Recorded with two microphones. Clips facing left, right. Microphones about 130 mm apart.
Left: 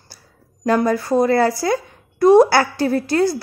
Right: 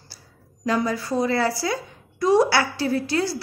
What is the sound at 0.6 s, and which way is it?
A woman's voice, 50° left (ahead or behind).